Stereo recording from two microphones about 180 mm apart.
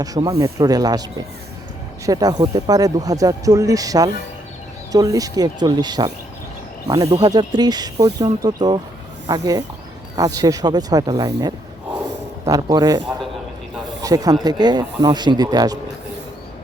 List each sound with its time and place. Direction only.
0.0 s speech: 20° right (ahead or behind)
2.0 s speech: 20° right (ahead or behind)